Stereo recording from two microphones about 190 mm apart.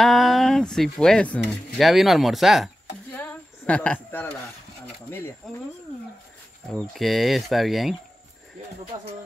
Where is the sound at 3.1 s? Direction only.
5° left (ahead or behind).